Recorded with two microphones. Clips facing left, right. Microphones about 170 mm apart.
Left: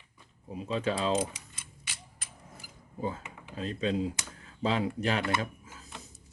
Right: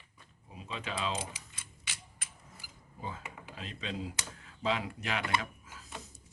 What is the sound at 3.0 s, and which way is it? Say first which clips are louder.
Speech: left 7 dB; 35° left (ahead or behind).